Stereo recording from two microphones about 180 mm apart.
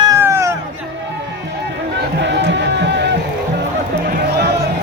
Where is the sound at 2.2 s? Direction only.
75° right (ahead or behind).